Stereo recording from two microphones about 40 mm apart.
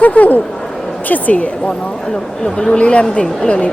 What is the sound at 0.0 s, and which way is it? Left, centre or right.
A woman's voice, left.